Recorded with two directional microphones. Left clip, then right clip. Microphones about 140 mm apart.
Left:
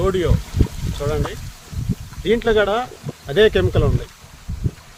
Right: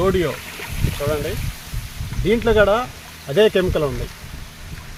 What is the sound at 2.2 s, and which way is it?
Speech, 25° left (ahead or behind).